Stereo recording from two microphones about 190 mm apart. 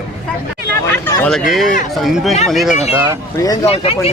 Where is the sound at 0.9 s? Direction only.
10° left (ahead or behind).